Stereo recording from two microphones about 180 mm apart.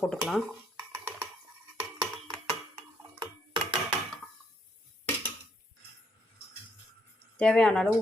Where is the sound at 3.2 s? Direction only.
25° right (ahead or behind).